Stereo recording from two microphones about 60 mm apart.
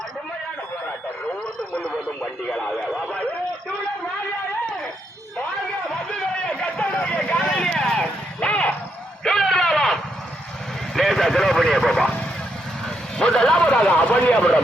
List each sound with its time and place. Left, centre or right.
2.5 s speech: centre
6.1 s a sound: centre
7.4 s vehicle: centre
8.4 s a sound: left
9.2 s a sound: centre
10.9 s vehicle: centre
13.1 s vehicle: centre
13.9 s speech: left
14.3 s speech: centre